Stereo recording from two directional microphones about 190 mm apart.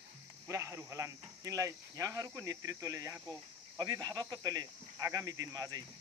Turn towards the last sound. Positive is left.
turn(degrees=-20)  # may be behind; listen again after turning